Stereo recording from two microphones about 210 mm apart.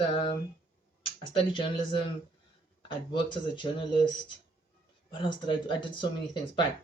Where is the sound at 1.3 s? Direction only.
25° left (ahead or behind).